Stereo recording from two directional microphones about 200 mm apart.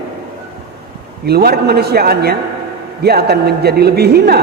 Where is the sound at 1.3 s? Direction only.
50° right (ahead or behind).